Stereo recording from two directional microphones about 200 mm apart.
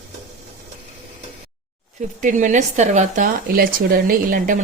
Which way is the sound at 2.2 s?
40° right (ahead or behind).